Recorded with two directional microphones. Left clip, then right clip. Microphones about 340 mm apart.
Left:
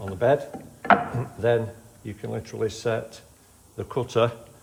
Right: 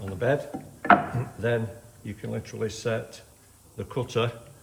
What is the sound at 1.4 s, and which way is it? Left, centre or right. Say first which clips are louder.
Speech: left 5 dB; centre.